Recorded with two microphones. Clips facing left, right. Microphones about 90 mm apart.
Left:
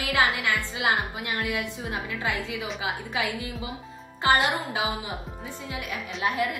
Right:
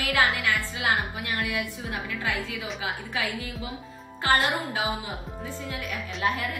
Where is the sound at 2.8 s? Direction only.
20° left (ahead or behind).